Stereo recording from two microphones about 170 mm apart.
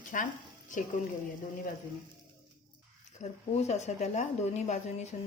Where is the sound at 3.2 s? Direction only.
40° left (ahead or behind).